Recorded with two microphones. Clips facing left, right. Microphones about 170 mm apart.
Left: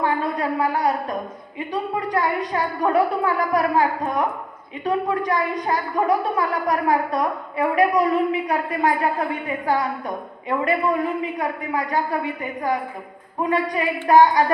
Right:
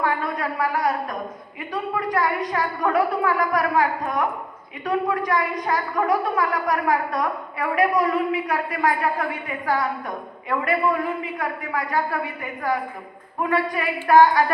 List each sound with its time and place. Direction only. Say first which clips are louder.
0.0 s a sound: left 2 dB; 25° left (ahead or behind)
1.7 s a woman's voice: left 1 dB; 25° left (ahead or behind)
4.9 s a woman's voice: left 1 dB; 25° left (ahead or behind)
10.5 s a woman's voice: left 1 dB; 25° left (ahead or behind)